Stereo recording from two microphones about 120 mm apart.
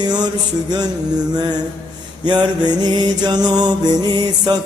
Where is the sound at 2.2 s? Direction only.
35° right (ahead or behind).